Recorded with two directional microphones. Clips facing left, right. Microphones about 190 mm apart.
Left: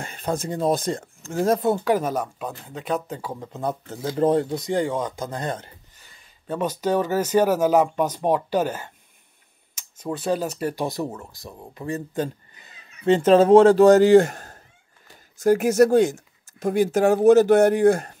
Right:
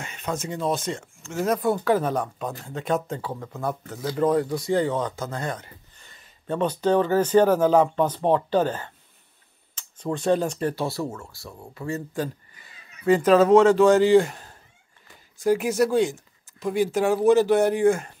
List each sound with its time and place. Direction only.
0.0 s speech: 35° left (ahead or behind)
2.0 s speech: 10° left (ahead or behind)
3.2 s speech: 15° left (ahead or behind)
5.9 s speech: 5° left (ahead or behind); by 18.1 s 40° left (ahead or behind)